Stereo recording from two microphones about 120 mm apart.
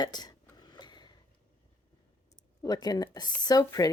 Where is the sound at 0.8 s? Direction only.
35° left (ahead or behind).